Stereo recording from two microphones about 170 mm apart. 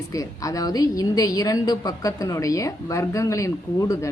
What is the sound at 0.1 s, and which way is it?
A woman's voice, 20° left (ahead or behind).